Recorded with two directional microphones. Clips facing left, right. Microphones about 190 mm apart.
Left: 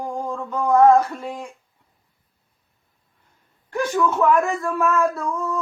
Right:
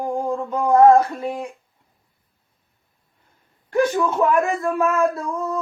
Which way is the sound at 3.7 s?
30° right (ahead or behind).